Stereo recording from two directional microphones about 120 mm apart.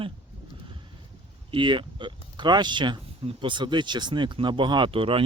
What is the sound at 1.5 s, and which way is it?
Speech, 40° right (ahead or behind).